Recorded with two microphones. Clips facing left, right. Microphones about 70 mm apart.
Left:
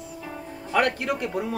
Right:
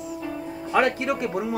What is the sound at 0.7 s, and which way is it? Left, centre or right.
Speech, centre.